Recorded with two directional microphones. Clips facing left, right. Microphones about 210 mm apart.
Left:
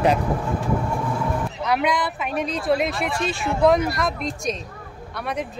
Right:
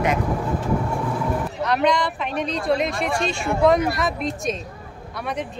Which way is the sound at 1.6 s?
5° left (ahead or behind).